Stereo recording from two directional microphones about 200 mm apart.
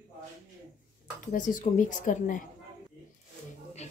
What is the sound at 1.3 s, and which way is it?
A woman's voice, 40° left (ahead or behind).